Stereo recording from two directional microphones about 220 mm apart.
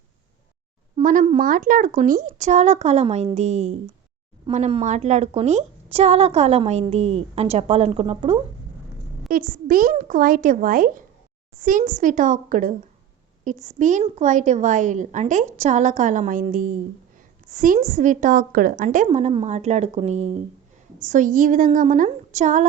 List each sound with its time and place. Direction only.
0.9 s a woman's voice: 35° right (ahead or behind)
9.3 s a woman's voice: 40° right (ahead or behind)